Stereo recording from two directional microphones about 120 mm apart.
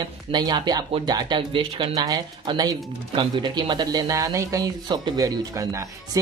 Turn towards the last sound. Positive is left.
turn(degrees=-25)  # may be behind; listen again after turning